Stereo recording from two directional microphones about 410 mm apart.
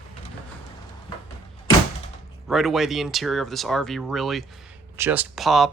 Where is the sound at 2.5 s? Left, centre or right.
Centre.